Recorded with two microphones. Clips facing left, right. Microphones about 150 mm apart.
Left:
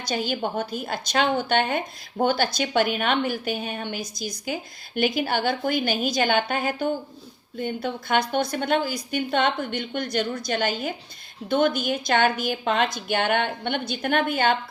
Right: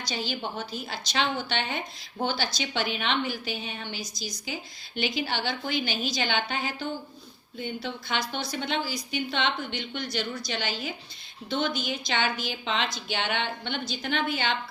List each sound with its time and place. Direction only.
0.1 s a woman's voice: 50° left (ahead or behind)